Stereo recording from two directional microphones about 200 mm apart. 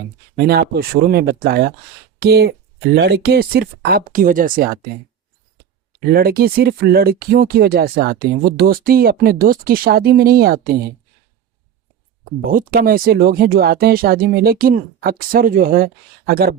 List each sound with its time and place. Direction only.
0.3 s speech: 50° right (ahead or behind)
6.1 s speech: 50° right (ahead or behind)
12.5 s speech: 45° right (ahead or behind)